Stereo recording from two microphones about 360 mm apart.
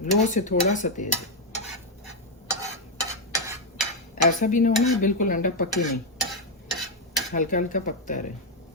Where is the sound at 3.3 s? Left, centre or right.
Centre.